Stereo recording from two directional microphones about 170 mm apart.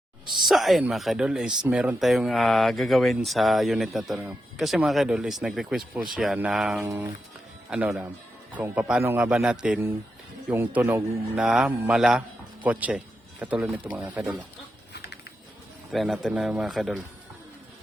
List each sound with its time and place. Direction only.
0.3 s speech: centre (ahead or behind)
6.8 s a man's voice: 15° right (ahead or behind)
7.7 s a man's voice: 5° right (ahead or behind)
15.9 s speech: centre (ahead or behind)